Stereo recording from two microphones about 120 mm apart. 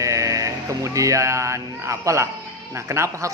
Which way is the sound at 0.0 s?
25° right (ahead or behind).